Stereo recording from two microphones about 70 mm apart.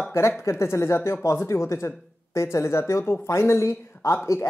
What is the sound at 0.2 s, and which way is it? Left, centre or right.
Speech, left.